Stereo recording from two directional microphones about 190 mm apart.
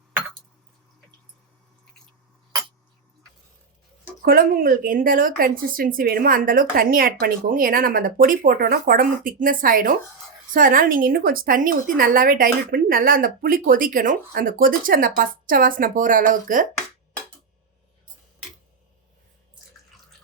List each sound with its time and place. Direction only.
4.2 s a woman's voice: 50° right (ahead or behind)